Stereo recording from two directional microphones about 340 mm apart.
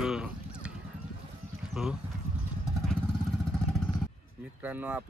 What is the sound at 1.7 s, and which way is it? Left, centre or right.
Speech, centre.